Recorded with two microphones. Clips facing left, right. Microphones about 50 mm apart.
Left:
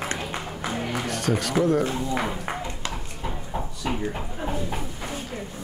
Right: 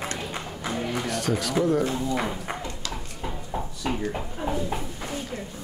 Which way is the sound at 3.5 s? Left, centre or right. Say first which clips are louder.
Even; centre.